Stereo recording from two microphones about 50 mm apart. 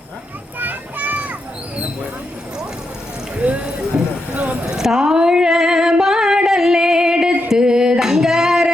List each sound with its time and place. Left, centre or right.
0.6 s children playing: right
3.3 s clip-clop: right
4.4 s a sound: right
7.4 s male singing: centre